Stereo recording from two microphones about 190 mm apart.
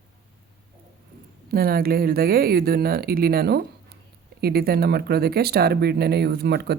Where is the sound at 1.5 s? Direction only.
50° right (ahead or behind).